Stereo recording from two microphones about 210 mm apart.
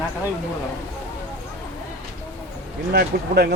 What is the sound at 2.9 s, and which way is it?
Speech, 50° right (ahead or behind).